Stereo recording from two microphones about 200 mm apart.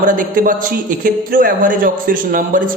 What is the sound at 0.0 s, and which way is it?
A man's voice, 45° right (ahead or behind).